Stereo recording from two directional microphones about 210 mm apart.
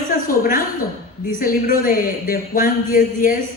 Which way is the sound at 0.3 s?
40° left (ahead or behind).